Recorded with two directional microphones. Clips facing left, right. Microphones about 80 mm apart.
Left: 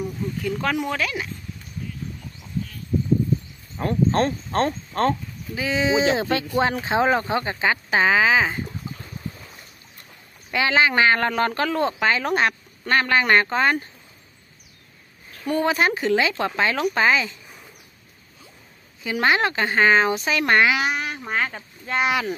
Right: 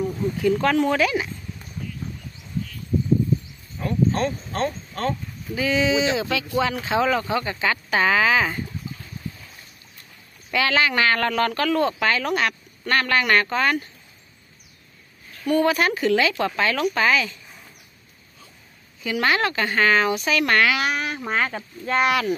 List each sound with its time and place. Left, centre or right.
0.4 s speech: centre
3.7 s speech: left
5.5 s speech: left
10.5 s speech: left
15.4 s speech: left
19.0 s speech: left
21.3 s speech: centre